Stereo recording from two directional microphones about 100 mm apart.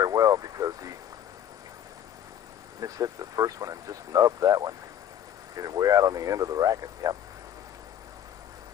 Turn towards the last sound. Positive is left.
turn(degrees=-35)  # may be behind; listen again after turning